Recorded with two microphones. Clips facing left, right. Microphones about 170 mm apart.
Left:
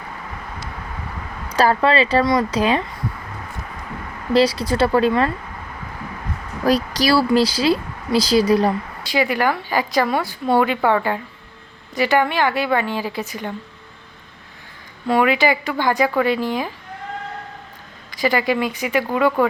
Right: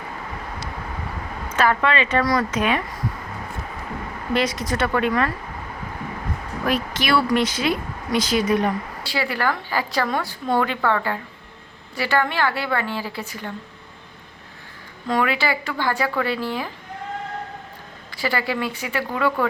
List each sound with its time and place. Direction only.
1.5 s speech: 35° left (ahead or behind)
4.4 s speech: 30° left (ahead or behind)
6.7 s speech: 35° left (ahead or behind)
9.0 s a woman's voice: 15° left (ahead or behind)
15.0 s a woman's voice: 15° left (ahead or behind)
18.1 s a woman's voice: 15° left (ahead or behind)